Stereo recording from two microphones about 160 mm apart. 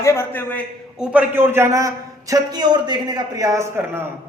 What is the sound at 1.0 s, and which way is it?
A man's voice, 10° right (ahead or behind).